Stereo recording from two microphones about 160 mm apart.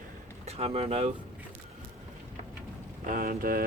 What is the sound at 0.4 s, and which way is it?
Speech, 40° right (ahead or behind).